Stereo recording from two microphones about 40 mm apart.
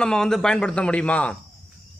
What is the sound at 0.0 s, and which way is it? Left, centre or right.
Speech, centre.